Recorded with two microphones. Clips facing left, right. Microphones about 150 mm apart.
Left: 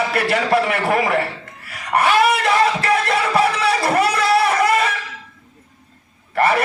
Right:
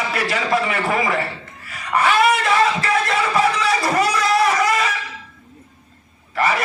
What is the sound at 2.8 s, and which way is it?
Music, 65° left (ahead or behind).